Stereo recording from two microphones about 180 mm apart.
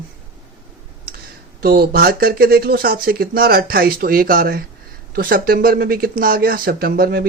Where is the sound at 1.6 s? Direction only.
55° right (ahead or behind).